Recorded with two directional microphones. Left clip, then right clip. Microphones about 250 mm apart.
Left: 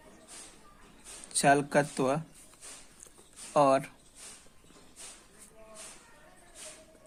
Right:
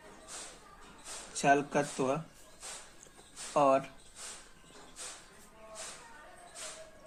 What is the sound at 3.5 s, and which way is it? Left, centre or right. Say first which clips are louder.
Speech: left 2 dB; left.